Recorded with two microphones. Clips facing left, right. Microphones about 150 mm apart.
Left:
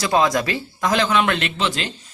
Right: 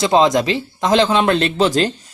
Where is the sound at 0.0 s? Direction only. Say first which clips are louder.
Right 5 dB; 20° right (ahead or behind).